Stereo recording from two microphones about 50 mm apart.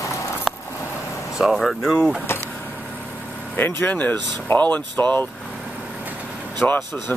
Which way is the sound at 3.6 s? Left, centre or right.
Left.